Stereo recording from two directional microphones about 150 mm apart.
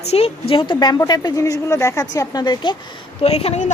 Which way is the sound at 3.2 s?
40° left (ahead or behind).